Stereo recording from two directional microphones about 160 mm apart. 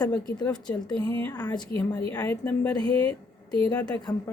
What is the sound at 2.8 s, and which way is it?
Speech, 35° right (ahead or behind).